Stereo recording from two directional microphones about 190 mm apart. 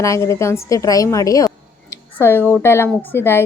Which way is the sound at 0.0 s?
15° left (ahead or behind).